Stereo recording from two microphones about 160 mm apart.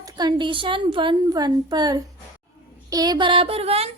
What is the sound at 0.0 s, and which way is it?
A woman's voice, 25° right (ahead or behind).